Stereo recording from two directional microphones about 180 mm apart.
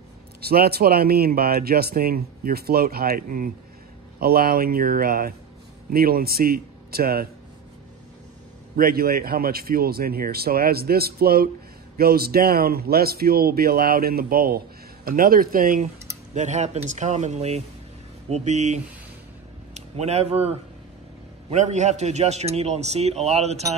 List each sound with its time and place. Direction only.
0.4 s a man's voice: 60° right (ahead or behind)
8.7 s speech: 55° right (ahead or behind)
16.3 s a man's voice: 40° right (ahead or behind)